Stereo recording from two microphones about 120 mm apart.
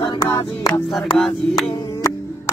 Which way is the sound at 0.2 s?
25° left (ahead or behind).